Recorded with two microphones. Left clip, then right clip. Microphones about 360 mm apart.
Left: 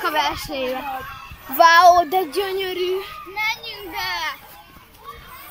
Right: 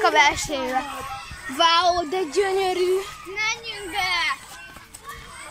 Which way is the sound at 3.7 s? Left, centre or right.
Centre.